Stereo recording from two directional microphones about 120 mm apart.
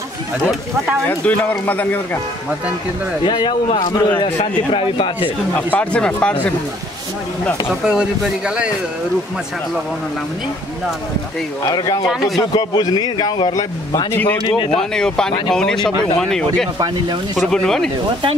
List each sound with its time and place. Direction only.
1.0 s speech: 15° left (ahead or behind)
3.3 s a man's voice: 40° left (ahead or behind)
5.7 s speech: 10° left (ahead or behind)
7.8 s speech: 5° right (ahead or behind)
11.7 s a man's voice: 35° left (ahead or behind)
14.1 s speech: 15° left (ahead or behind)
14.4 s a man's voice: 50° left (ahead or behind)
14.8 s speech: 5° left (ahead or behind)